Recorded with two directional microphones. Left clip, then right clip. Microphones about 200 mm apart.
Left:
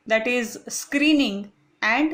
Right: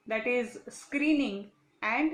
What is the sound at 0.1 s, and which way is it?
Speech, 40° left (ahead or behind).